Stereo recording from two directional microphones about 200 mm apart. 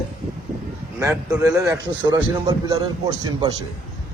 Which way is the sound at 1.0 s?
15° right (ahead or behind).